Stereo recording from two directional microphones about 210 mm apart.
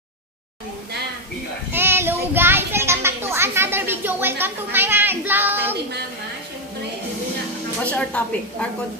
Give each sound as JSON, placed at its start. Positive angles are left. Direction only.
{"t": 1.7, "sound": "child singing", "side_deg": -10}
{"t": 7.8, "sound": "a woman's voice", "side_deg": 5}